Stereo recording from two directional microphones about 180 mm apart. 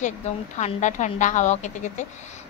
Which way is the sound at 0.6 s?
40° left (ahead or behind).